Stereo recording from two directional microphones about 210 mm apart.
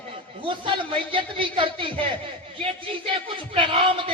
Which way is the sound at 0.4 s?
25° right (ahead or behind).